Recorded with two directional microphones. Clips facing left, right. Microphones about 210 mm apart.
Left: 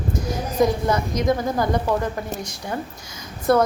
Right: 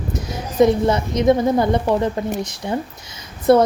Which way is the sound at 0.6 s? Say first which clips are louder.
Right 5 dB; 25° right (ahead or behind).